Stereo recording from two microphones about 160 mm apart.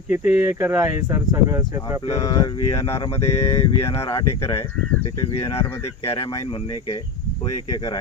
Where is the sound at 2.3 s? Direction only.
20° left (ahead or behind).